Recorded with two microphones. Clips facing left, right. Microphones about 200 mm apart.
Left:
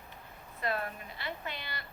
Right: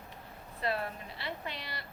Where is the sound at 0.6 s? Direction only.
30° right (ahead or behind).